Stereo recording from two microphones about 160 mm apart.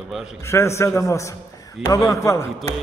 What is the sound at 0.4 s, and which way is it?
A man's voice, 15° left (ahead or behind).